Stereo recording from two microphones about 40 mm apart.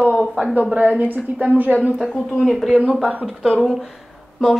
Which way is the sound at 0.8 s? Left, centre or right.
Right.